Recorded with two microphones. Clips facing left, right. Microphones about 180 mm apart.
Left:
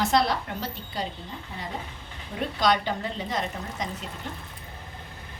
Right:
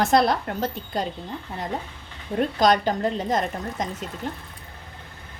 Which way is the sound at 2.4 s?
45° right (ahead or behind).